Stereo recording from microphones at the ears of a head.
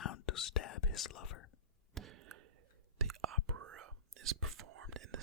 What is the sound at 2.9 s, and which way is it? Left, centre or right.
Whispering, right.